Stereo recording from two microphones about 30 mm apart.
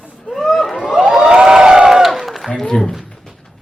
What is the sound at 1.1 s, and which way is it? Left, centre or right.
Crowd, centre.